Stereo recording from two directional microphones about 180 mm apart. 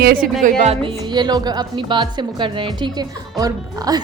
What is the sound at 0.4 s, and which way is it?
A woman's voice, 35° right (ahead or behind).